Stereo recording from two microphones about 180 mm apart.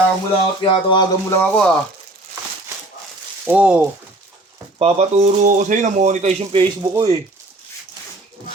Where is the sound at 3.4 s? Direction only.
10° right (ahead or behind).